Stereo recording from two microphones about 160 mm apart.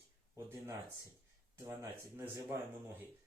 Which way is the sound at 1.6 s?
15° right (ahead or behind).